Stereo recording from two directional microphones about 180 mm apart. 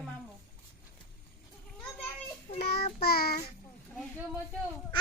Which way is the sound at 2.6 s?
60° left (ahead or behind).